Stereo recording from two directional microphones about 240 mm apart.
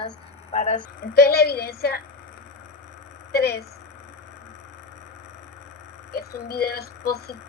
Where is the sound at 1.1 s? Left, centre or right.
Left.